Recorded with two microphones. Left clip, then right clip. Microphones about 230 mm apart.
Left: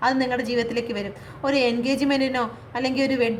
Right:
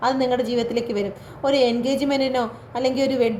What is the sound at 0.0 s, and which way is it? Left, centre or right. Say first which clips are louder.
A woman's voice: right 2 dB; left.